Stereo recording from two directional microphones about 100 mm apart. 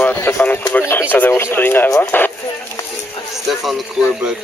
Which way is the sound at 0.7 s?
20° left (ahead or behind).